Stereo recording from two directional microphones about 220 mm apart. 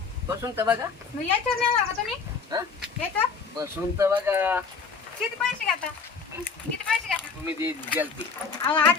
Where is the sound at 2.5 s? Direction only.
15° right (ahead or behind).